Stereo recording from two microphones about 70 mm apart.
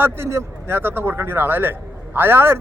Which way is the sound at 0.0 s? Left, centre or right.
Right.